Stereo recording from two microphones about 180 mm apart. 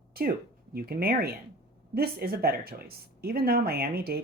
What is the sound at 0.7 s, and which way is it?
Speech, 60° right (ahead or behind).